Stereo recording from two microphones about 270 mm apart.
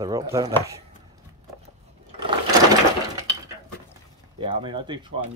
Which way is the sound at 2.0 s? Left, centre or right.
Centre.